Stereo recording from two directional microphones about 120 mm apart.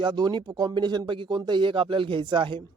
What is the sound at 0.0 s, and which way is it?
Speech, 40° right (ahead or behind).